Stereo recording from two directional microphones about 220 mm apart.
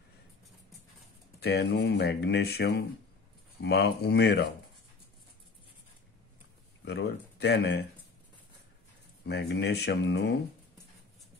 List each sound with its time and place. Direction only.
1.4 s speech: 45° left (ahead or behind)
6.8 s speech: 50° left (ahead or behind)
9.3 s speech: 50° left (ahead or behind)